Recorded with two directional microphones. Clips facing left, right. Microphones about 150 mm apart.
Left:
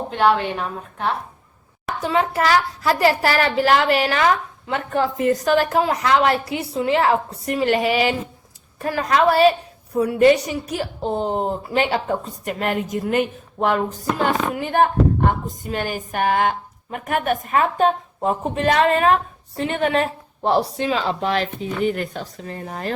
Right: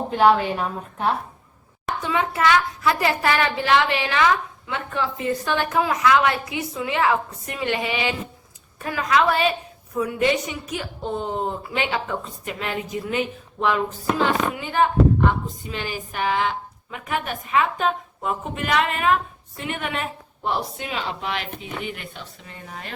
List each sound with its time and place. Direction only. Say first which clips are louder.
0.1 s a woman's voice: right 1 dB; 5° right (ahead or behind)
2.0 s a woman's voice: left 3 dB; 40° left (ahead or behind)